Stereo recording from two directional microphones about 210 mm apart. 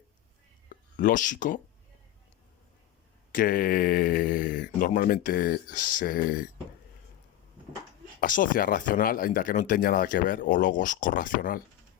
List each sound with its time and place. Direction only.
0.7 s speech: 40° left (ahead or behind)
3.3 s speech: 40° left (ahead or behind)
8.2 s speech: 40° left (ahead or behind)